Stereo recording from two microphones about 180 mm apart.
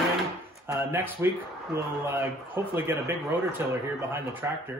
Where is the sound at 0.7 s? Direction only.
15° right (ahead or behind).